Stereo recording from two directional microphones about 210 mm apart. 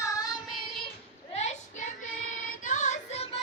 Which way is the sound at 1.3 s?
30° left (ahead or behind).